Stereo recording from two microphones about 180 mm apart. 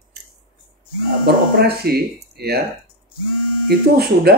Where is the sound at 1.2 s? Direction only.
60° right (ahead or behind).